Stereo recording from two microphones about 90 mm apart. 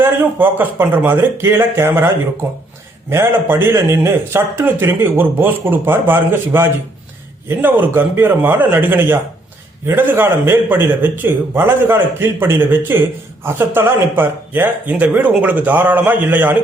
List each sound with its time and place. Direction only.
0.0 s speech: 25° right (ahead or behind)